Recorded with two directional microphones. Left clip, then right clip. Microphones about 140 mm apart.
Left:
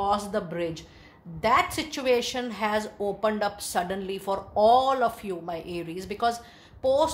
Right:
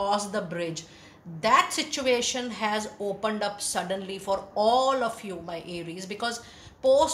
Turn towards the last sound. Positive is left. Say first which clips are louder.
# right 2 dB
turn(degrees=45)  # may be behind; listen again after turning